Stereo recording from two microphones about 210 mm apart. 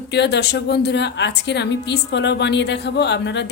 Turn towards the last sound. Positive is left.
turn(degrees=55)  # may be behind; listen again after turning